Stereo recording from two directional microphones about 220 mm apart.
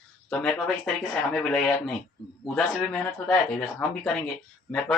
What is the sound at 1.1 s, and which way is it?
Speech, centre (ahead or behind).